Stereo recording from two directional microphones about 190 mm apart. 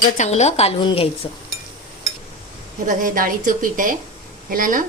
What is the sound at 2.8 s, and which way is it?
A woman's voice, 45° right (ahead or behind).